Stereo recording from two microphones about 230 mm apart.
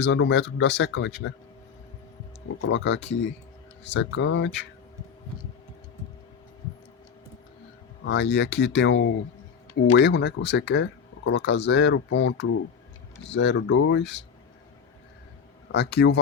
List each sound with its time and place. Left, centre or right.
0.0 s speech: left
2.6 s speech: left
8.0 s speech: left
15.7 s speech: left